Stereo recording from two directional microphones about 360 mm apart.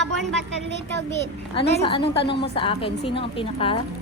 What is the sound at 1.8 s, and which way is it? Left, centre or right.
A woman's voice, centre.